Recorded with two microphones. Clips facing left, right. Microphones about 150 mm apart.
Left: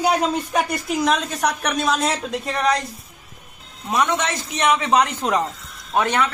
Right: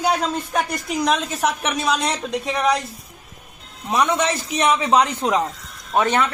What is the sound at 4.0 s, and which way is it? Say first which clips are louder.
A man's voice: right 2 dB; 10° right (ahead or behind).